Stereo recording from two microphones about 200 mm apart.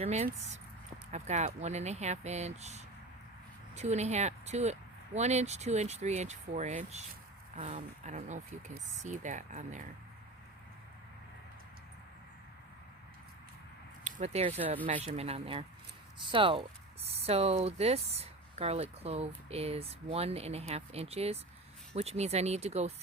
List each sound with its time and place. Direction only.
0.0 s speech: 35° right (ahead or behind)
14.0 s speech: 35° right (ahead or behind)